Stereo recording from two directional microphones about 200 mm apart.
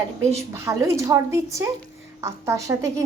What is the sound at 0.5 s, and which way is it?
A woman's voice, 15° right (ahead or behind).